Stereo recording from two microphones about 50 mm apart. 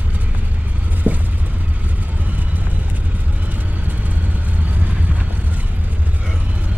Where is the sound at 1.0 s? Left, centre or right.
Right.